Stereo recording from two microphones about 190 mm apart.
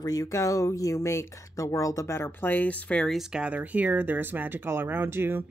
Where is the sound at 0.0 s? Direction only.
20° left (ahead or behind).